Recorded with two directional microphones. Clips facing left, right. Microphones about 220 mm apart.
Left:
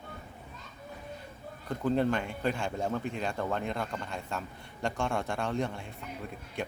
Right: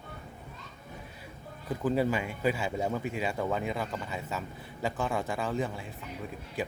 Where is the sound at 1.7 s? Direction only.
5° right (ahead or behind).